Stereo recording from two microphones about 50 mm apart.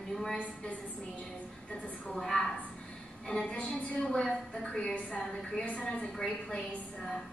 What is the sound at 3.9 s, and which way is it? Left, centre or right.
A man's voice, centre.